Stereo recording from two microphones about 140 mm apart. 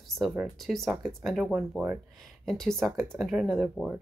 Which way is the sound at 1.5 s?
10° right (ahead or behind).